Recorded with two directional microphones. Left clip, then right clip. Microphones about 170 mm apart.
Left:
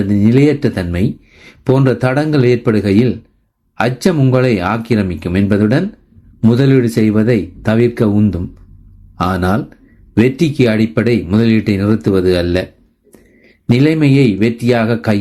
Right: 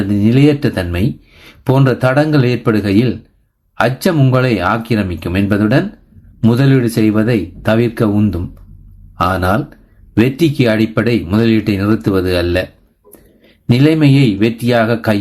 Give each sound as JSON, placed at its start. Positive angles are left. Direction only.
{"t": 0.0, "sound": "speech", "side_deg": 25}